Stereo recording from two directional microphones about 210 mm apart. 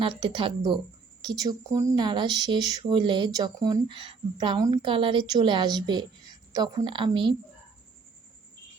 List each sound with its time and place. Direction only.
0.0 s speech: 25° right (ahead or behind)